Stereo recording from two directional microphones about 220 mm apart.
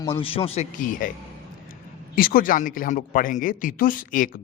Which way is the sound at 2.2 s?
40° left (ahead or behind).